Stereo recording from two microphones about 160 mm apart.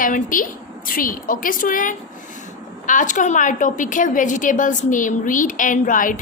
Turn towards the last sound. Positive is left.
turn(degrees=55)  # may be behind; listen again after turning